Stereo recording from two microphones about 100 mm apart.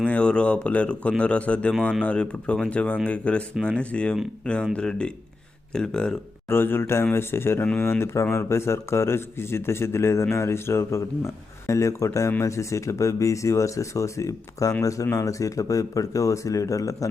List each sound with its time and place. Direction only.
0.0 s speech: 10° left (ahead or behind)
6.5 s speech: 20° left (ahead or behind)